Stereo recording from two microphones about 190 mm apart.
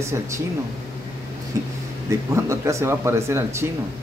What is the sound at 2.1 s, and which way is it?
Speech, 15° right (ahead or behind).